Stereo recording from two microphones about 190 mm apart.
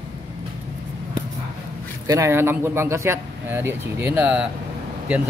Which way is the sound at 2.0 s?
15° right (ahead or behind).